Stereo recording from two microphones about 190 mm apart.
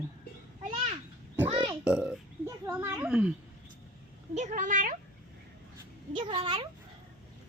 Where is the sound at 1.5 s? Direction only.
25° right (ahead or behind).